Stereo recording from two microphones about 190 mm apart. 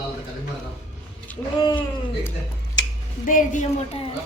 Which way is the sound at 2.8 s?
70° left (ahead or behind).